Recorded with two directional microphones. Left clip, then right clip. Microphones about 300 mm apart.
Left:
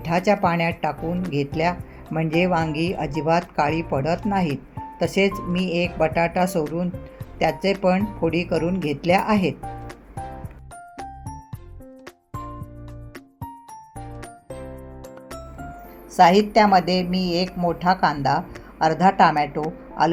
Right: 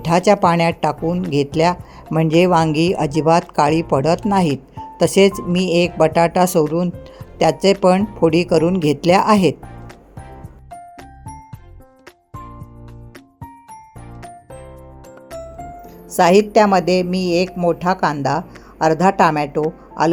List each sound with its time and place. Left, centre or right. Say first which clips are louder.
0.0 s a woman's voice: right 6 dB; right
16.1 s a woman's voice: right 3 dB; centre